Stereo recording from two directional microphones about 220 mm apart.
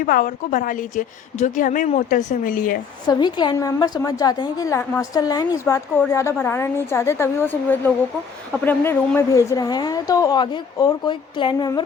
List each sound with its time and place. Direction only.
0.0 s a woman's voice: 40° left (ahead or behind)
3.1 s a woman's voice: 20° left (ahead or behind)